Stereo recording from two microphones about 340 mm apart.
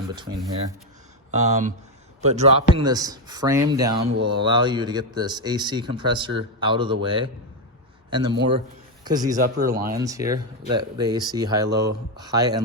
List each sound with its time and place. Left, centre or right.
1.3 s speech: centre
4.1 s speech: right
4.4 s speech: centre